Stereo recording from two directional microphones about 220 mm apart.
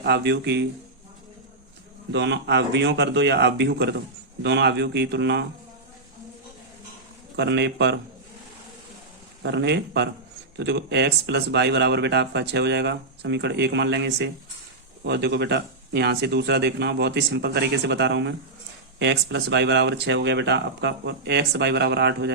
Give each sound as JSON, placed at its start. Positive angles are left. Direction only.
{"t": 0.0, "sound": "speech", "side_deg": -50}
{"t": 2.1, "sound": "speech", "side_deg": -55}
{"t": 7.3, "sound": "speech", "side_deg": -50}
{"t": 9.4, "sound": "speech", "side_deg": -50}